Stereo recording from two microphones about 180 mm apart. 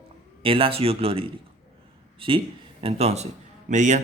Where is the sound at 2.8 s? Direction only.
35° right (ahead or behind).